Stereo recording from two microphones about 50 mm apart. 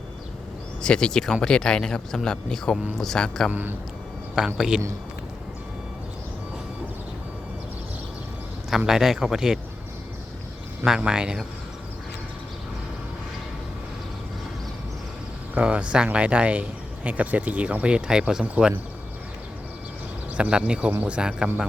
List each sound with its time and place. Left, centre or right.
0.8 s speech: centre
3.5 s a man's voice: right
4.4 s speech: centre
8.9 s speech: centre
10.8 s speech: centre
15.5 s speech: right
20.3 s a man's voice: right
21.2 s speech: centre